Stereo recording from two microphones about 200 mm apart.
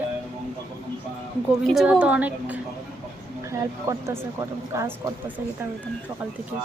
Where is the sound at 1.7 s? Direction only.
5° right (ahead or behind).